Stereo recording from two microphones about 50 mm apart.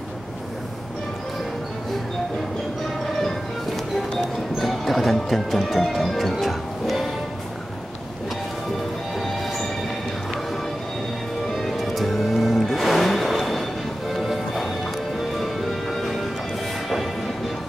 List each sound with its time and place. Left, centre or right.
3.2 s music: centre
4.6 s speech: centre
6.4 s music: centre
11.5 s music: centre